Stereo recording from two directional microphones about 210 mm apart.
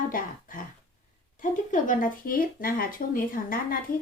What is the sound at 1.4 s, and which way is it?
Speech, 40° left (ahead or behind).